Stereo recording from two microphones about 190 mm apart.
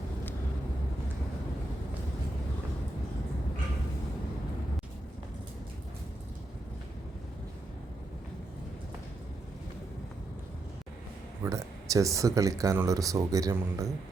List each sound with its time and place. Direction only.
11.4 s speech: 15° right (ahead or behind)